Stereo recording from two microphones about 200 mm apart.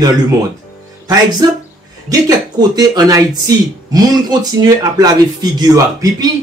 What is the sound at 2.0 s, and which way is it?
Speech, 20° right (ahead or behind).